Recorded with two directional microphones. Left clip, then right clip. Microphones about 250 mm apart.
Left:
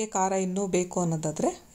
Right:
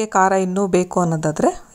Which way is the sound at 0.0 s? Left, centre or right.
Centre.